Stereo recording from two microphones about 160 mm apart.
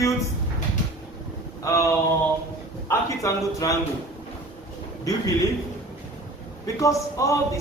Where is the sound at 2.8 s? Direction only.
20° left (ahead or behind).